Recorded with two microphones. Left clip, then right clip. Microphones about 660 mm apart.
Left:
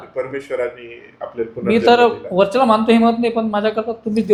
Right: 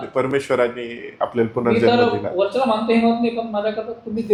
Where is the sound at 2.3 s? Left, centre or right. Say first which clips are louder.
Left 7 dB; left.